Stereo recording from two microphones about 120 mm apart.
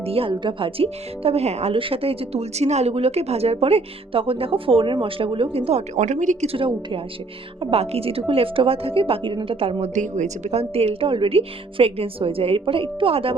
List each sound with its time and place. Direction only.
0.0 s speech: 50° right (ahead or behind); by 6.5 s 90° right
6.5 s a woman's voice: 50° right (ahead or behind)
9.9 s a woman's voice: 90° right; by 13.3 s 50° right (ahead or behind)